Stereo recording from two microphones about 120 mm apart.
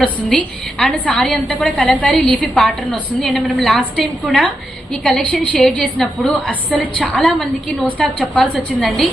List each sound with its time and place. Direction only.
0.0 s a woman's voice: 10° left (ahead or behind)